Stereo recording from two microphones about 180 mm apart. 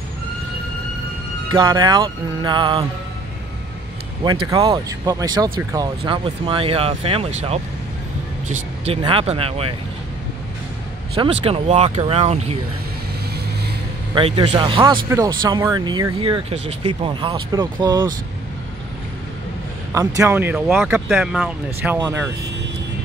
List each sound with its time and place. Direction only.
1.5 s speech: 25° right (ahead or behind)
4.2 s speech: 20° right (ahead or behind)
11.4 s speech: 35° right (ahead or behind)
14.1 s speech: 25° right (ahead or behind)
20.2 s speech: 10° right (ahead or behind)